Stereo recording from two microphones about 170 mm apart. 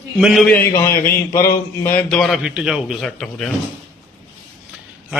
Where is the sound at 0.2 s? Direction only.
Centre (ahead or behind).